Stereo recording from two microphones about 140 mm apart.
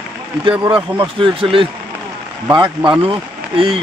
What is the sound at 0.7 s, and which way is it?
Speech, 35° right (ahead or behind).